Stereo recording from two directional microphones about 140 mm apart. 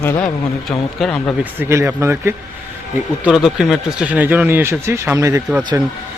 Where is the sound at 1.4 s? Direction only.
15° right (ahead or behind).